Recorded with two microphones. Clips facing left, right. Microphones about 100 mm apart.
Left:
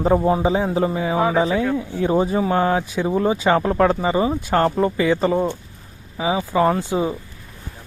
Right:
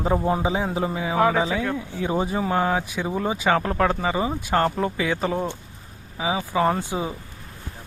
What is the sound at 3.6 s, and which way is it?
Speech, 20° left (ahead or behind).